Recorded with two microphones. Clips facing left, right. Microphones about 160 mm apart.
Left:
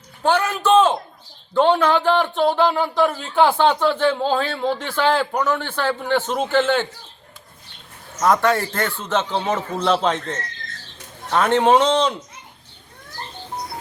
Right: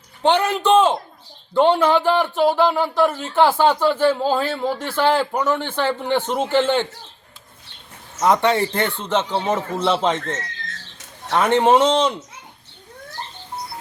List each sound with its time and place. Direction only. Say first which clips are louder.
0.2 s speech: right 2 dB; 20° right (ahead or behind)
8.2 s a man's voice: right 1 dB; 20° right (ahead or behind)
11.3 s speech: even; 10° right (ahead or behind)